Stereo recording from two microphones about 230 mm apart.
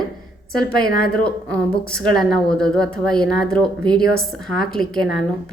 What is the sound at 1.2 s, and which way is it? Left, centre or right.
A woman's voice, centre.